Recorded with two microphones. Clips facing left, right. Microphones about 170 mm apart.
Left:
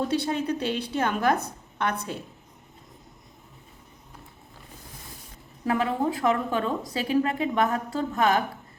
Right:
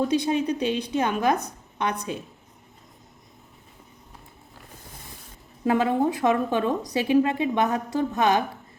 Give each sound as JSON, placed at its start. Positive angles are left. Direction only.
{"t": 0.1, "sound": "a woman's voice", "side_deg": -15}
{"t": 5.6, "sound": "a woman's voice", "side_deg": -25}